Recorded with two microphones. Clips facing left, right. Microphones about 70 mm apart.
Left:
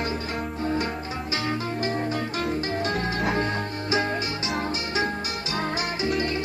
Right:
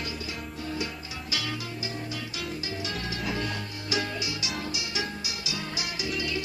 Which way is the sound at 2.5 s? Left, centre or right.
Left.